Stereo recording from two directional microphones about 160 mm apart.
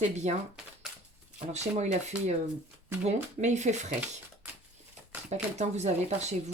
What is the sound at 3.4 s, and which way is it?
Speech, 45° right (ahead or behind).